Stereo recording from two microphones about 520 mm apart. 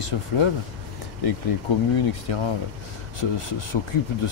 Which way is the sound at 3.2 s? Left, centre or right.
Left.